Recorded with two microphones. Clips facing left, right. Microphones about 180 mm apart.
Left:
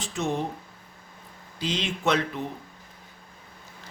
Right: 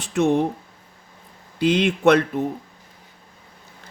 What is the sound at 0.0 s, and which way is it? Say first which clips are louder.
Speech: right 9 dB; 60° right (ahead or behind).